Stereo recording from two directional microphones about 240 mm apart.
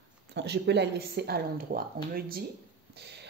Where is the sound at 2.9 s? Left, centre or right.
Right.